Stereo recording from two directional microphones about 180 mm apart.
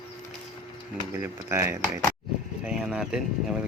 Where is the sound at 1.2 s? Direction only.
15° right (ahead or behind).